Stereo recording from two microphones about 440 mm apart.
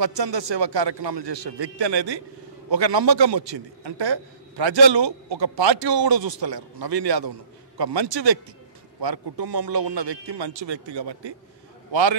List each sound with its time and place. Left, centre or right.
0.0 s a man's voice: right
11.9 s a man's voice: right